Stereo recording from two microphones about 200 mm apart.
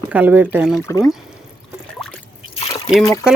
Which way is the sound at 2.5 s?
25° left (ahead or behind).